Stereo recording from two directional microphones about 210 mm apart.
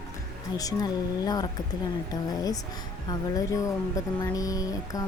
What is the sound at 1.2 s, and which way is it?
Speech, 20° left (ahead or behind).